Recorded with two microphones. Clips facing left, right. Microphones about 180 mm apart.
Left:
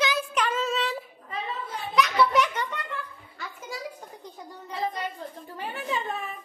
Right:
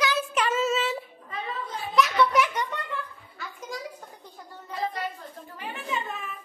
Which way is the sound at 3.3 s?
5° left (ahead or behind).